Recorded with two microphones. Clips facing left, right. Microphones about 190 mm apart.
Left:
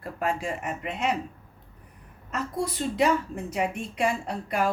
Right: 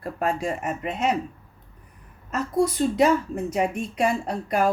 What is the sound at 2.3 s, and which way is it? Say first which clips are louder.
Speech: right 7 dB; 40° right (ahead or behind).